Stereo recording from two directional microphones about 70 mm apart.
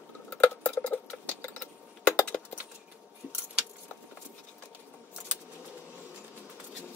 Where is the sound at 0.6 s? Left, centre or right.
Left.